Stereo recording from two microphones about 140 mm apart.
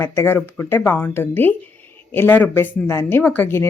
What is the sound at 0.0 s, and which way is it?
A woman's voice, 15° left (ahead or behind).